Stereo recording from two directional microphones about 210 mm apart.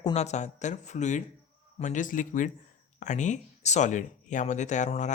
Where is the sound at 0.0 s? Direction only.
30° left (ahead or behind).